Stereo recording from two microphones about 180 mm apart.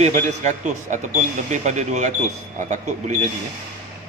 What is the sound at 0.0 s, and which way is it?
Speech, 40° right (ahead or behind).